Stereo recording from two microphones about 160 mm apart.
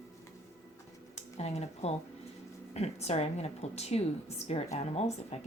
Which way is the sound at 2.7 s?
40° left (ahead or behind).